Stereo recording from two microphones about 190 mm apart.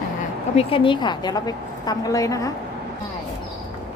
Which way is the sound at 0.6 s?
30° left (ahead or behind).